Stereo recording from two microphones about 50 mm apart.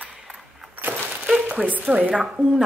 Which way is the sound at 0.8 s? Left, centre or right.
Right.